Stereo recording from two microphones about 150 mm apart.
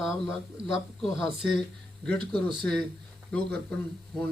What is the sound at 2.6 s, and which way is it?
Mantra, 5° left (ahead or behind).